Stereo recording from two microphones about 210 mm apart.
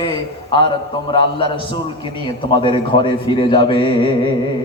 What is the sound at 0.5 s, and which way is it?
A man's voice, 25° left (ahead or behind).